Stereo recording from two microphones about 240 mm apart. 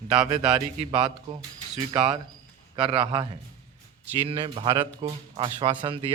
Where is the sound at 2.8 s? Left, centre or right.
Right.